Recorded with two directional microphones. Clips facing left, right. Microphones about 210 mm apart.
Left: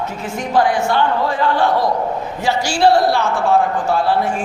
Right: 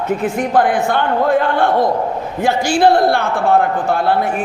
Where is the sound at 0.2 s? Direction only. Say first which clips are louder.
Left 1 dB; 55° right (ahead or behind).